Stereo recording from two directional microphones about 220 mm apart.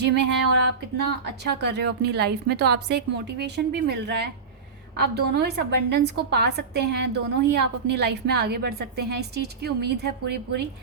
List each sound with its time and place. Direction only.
0.0 s a woman's voice: 50° right (ahead or behind)